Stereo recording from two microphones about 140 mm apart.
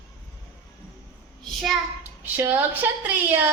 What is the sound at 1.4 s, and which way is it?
Child singing, centre (ahead or behind).